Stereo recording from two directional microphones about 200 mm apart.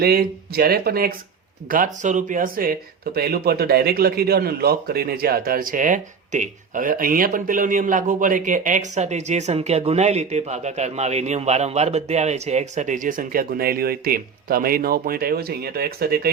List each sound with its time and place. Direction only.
0.0 s speech: 50° right (ahead or behind)